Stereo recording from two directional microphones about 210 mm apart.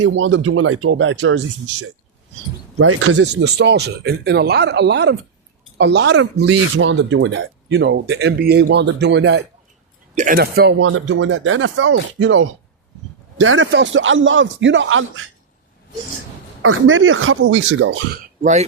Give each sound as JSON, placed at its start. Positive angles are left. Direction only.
{"t": 0.0, "sound": "speech", "side_deg": -65}
{"t": 2.7, "sound": "speech", "side_deg": -90}
{"t": 10.2, "sound": "speech", "side_deg": -45}
{"t": 10.8, "sound": "speech", "side_deg": -70}
{"t": 16.6, "sound": "speech", "side_deg": -75}